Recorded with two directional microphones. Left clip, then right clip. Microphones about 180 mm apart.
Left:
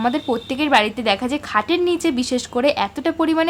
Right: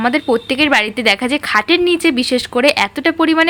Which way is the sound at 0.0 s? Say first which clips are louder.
Right 6 dB; 15° right (ahead or behind).